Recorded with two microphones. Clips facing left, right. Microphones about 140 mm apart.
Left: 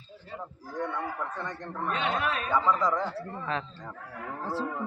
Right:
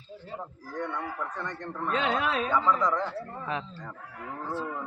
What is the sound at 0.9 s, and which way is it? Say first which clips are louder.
A man's voice: left 1 dB; 10° left (ahead or behind).